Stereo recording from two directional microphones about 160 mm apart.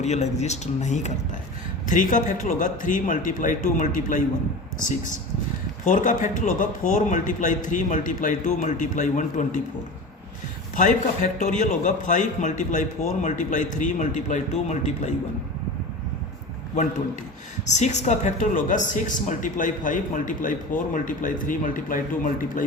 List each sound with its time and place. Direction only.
0.0 s a man's voice: 45° left (ahead or behind)
10.8 s a man's voice: 50° left (ahead or behind)
17.7 s speech: 45° left (ahead or behind)